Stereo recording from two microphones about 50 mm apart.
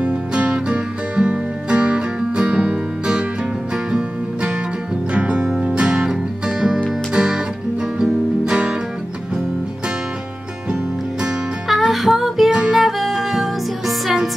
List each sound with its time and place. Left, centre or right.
0.0 s music: right
10.7 s music: centre
11.6 s music: centre